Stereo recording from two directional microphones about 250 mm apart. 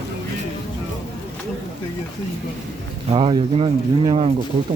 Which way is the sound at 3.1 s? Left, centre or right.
Right.